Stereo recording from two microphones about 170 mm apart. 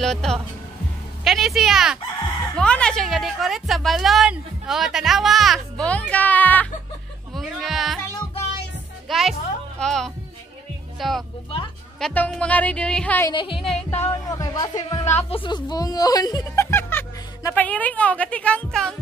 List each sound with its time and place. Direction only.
0.0 s a woman's voice: 5° left (ahead or behind)
7.3 s a woman's voice: centre (ahead or behind)
9.1 s a woman's voice: centre (ahead or behind)
13.3 s speech: 30° left (ahead or behind)
13.8 s speech: 15° left (ahead or behind)
15.1 s speech: 35° left (ahead or behind); by 18.9 s 5° left (ahead or behind)